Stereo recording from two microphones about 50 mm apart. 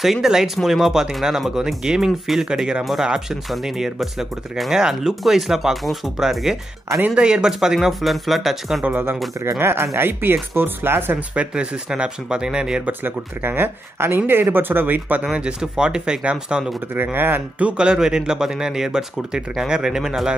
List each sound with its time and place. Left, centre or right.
0.0 s speech: centre
2.8 s speech: centre
7.2 s speech: centre
8.8 s speech: right
9.4 s speech: right
11.1 s speech: right
12.8 s speech: right
15.3 s speech: centre
16.9 s speech: right
17.6 s speech: right
17.8 s speech: centre